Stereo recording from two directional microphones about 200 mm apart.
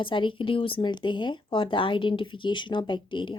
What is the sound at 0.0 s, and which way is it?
Speech, 25° left (ahead or behind).